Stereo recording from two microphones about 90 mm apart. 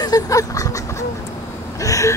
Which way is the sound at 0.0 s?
40° left (ahead or behind).